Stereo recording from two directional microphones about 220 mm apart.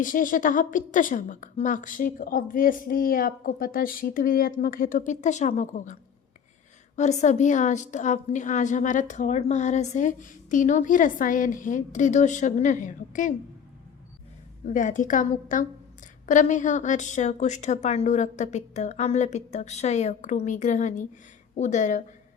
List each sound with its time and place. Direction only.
0.0 s a woman's voice: 35° left (ahead or behind)
14.7 s a woman's voice: 35° left (ahead or behind)